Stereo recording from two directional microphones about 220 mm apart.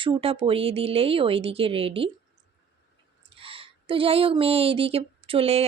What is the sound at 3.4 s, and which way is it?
Speech, 25° right (ahead or behind).